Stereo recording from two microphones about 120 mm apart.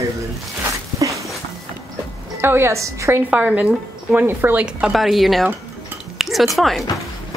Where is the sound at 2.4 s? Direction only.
20° right (ahead or behind); by 6.9 s centre (ahead or behind).